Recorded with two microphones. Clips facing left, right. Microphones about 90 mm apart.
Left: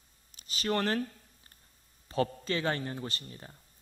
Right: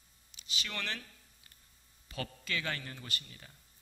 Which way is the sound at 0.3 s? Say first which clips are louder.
Left 11 dB; 40° left (ahead or behind).